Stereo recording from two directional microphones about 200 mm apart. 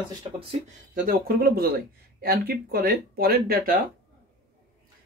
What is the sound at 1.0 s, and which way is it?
Speech, 50° right (ahead or behind).